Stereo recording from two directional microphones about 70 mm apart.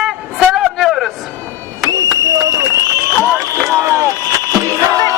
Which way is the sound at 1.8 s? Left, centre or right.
Right.